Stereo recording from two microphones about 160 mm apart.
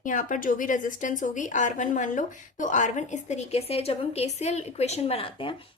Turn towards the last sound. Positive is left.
turn(degrees=35)  # may be behind; listen again after turning